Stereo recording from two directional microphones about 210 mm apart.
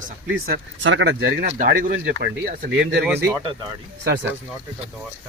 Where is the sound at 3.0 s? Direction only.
10° right (ahead or behind).